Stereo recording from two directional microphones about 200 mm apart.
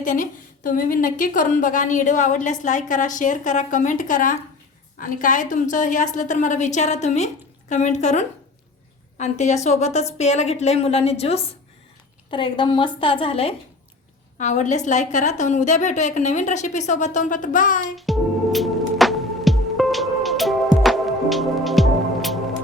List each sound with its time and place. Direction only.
0.0 s a woman's voice: 40° left (ahead or behind)
17.9 s music: centre (ahead or behind)